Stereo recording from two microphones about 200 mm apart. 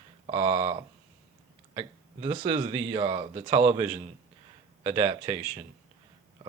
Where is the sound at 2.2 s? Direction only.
25° right (ahead or behind).